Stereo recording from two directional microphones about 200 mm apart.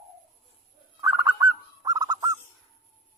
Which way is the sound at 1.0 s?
15° right (ahead or behind).